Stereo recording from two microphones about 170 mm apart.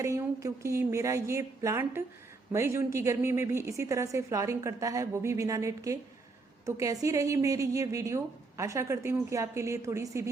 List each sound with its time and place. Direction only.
0.0 s a woman's voice: 15° right (ahead or behind)